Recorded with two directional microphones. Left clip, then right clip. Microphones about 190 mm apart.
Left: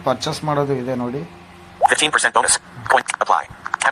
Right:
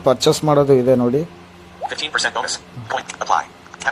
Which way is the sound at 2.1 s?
60° left (ahead or behind).